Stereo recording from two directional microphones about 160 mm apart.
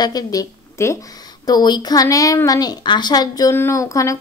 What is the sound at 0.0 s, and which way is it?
A woman's voice, 25° left (ahead or behind).